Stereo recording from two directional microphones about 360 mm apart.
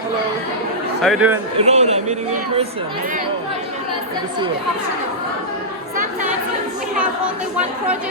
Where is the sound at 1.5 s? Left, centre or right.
Centre.